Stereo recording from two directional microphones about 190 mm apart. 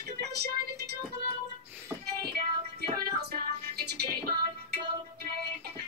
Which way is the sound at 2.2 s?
55° right (ahead or behind).